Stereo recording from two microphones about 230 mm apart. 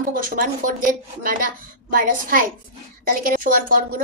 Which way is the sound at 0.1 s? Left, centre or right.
Right.